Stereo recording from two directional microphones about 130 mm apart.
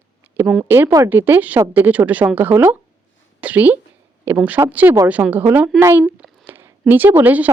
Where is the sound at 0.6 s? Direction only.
20° right (ahead or behind).